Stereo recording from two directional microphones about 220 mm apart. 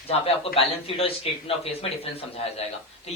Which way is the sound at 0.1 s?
25° left (ahead or behind).